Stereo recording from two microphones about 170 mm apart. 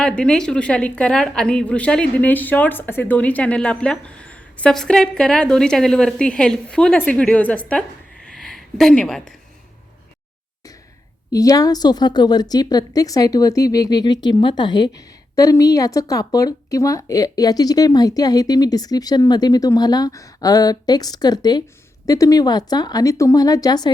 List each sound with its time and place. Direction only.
0.0 s a woman's voice: 5° left (ahead or behind)
11.3 s a woman's voice: 20° left (ahead or behind)